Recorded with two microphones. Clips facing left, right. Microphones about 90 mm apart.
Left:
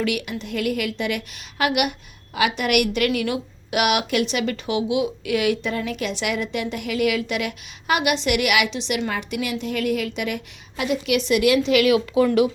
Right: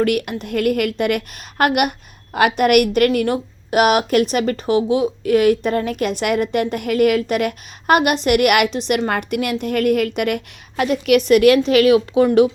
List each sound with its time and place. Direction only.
0.0 s a woman's voice: 50° right (ahead or behind); by 12.5 s 35° right (ahead or behind)